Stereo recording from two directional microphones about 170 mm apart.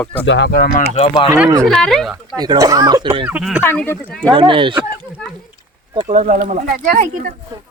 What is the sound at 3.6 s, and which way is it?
Speech, 10° left (ahead or behind).